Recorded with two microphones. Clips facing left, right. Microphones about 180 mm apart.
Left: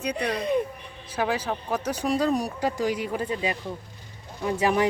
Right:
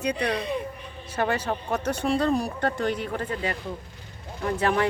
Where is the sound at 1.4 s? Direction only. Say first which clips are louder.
Right 1 dB; centre (ahead or behind).